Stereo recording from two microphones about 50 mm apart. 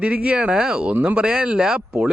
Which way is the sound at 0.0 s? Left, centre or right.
Right.